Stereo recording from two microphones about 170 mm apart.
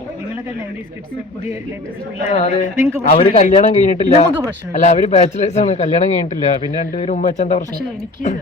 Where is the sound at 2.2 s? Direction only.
35° left (ahead or behind).